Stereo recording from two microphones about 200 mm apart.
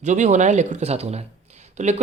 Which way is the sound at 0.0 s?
35° right (ahead or behind).